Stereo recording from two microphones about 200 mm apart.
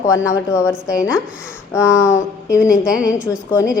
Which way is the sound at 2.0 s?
15° left (ahead or behind).